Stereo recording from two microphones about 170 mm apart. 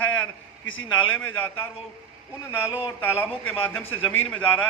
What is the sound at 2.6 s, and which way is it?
Speech, 10° right (ahead or behind).